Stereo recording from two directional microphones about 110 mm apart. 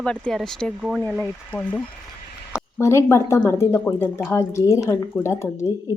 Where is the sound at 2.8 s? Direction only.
25° left (ahead or behind).